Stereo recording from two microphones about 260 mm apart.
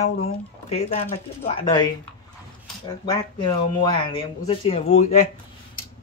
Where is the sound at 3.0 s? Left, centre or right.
Centre.